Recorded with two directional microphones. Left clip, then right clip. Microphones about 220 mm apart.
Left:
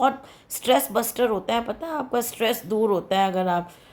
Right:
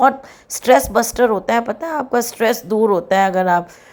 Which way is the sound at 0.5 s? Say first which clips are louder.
Right 8 dB; 15° right (ahead or behind).